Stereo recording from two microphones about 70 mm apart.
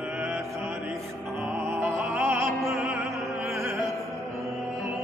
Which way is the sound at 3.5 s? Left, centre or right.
Right.